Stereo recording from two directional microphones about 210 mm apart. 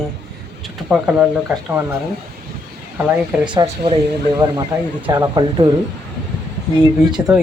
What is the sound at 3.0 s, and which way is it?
Speech, 10° right (ahead or behind).